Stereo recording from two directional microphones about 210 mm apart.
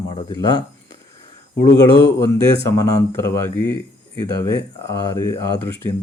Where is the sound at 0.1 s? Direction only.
20° left (ahead or behind).